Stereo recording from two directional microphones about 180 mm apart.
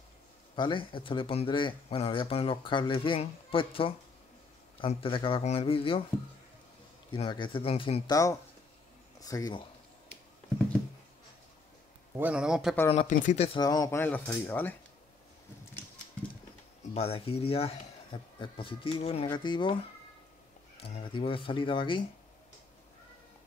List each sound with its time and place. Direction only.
0.6 s speech: 25° left (ahead or behind)
7.1 s speech: 25° left (ahead or behind)
8.1 s speech: 20° left (ahead or behind)
12.2 s a man's voice: 5° right (ahead or behind)
12.9 s speech: 40° left (ahead or behind)
13.6 s speech: 20° left (ahead or behind)
16.9 s speech: 35° left (ahead or behind)
20.8 s speech: 30° left (ahead or behind)